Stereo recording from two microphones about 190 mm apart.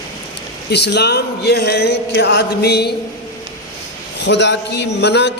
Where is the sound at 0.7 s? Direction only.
60° left (ahead or behind).